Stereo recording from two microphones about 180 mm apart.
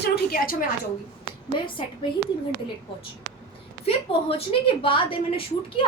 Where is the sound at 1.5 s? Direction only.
25° left (ahead or behind).